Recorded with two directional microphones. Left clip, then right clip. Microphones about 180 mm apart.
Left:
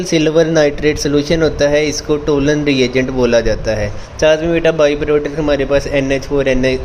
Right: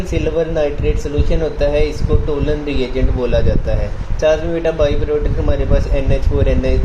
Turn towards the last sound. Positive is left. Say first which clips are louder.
# left 5 dB
turn(degrees=40)  # may be behind; listen again after turning